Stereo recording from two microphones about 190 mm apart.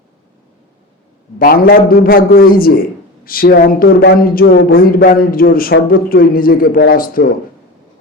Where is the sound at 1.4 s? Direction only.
50° left (ahead or behind).